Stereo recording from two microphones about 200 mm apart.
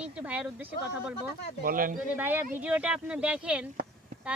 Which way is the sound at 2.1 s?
10° right (ahead or behind).